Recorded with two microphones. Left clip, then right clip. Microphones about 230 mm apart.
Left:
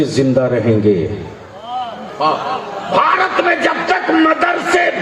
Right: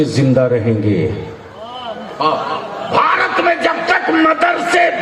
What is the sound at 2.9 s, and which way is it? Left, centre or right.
Music, right.